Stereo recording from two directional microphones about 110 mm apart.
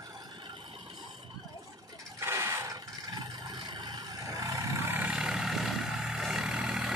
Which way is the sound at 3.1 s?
40° right (ahead or behind).